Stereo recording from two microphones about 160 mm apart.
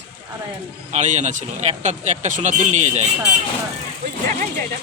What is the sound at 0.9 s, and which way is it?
A man's voice, 50° right (ahead or behind).